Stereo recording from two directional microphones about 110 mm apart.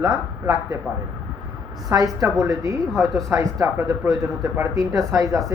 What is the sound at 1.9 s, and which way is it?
A man's voice, 30° right (ahead or behind).